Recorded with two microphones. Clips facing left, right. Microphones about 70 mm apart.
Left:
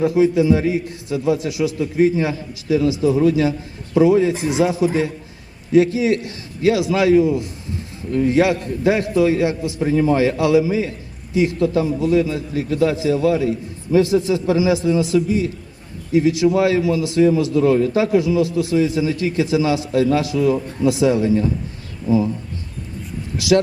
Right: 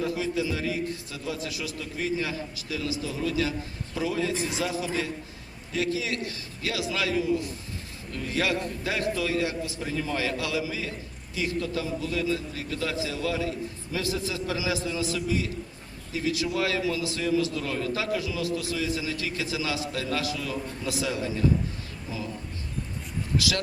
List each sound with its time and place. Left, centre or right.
0.0 s a man's voice: left
21.1 s a man's voice: left